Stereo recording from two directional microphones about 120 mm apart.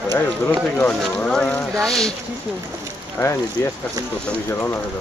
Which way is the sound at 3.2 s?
25° left (ahead or behind).